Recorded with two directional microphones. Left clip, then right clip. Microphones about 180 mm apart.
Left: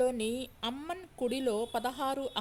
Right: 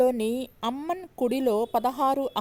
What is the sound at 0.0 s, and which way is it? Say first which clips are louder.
A woman's voice: right 7 dB; 40° right (ahead or behind).